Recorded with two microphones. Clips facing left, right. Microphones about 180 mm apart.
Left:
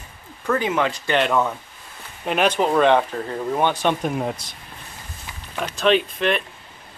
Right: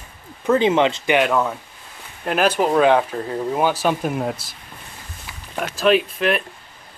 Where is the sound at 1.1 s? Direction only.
5° right (ahead or behind).